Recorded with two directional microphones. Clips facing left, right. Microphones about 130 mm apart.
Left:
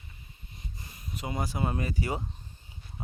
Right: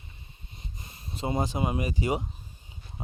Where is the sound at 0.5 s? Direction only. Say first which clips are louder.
Even; 25° right (ahead or behind).